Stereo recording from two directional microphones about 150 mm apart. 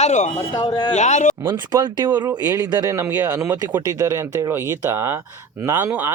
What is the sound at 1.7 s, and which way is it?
Speech, 30° right (ahead or behind).